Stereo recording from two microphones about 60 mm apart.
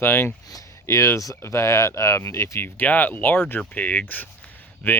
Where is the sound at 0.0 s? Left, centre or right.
Left.